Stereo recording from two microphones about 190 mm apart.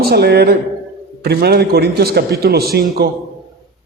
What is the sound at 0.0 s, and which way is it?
A man's voice, 55° right (ahead or behind).